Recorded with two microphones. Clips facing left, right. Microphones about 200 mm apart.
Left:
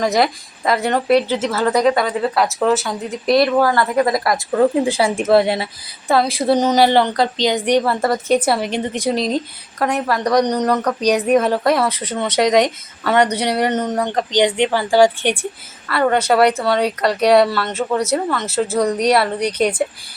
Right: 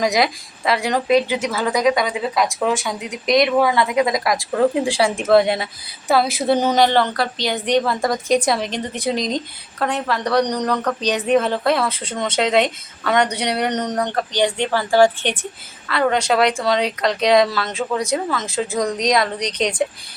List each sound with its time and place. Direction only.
0.1 s speech: centre (ahead or behind)
3.6 s speech: centre (ahead or behind)
6.7 s a woman's voice: 10° left (ahead or behind)
14.1 s a woman's voice: 20° left (ahead or behind)